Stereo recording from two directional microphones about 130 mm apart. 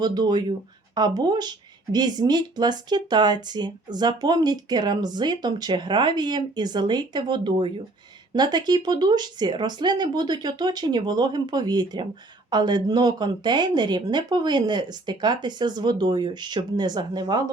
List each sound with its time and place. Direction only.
0.0 s speech: 30° right (ahead or behind)